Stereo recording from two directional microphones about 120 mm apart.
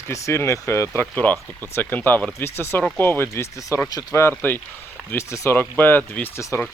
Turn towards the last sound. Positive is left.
turn(degrees=20)  # may be behind; listen again after turning